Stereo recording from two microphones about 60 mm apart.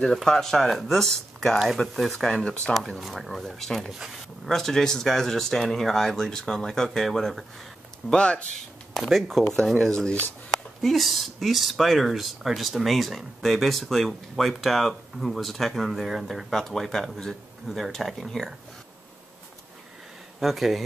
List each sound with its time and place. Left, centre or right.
0.1 s speech: centre
2.7 s speech: centre
8.1 s speech: centre
8.9 s speech: centre
9.8 s speech: centre
10.8 s speech: centre
20.3 s speech: centre